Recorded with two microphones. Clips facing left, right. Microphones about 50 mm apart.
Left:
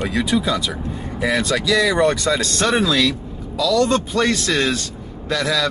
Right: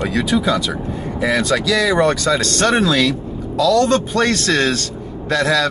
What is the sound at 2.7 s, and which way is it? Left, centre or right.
Speech, centre.